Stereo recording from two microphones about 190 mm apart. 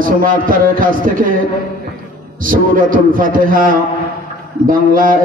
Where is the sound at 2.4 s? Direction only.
45° right (ahead or behind).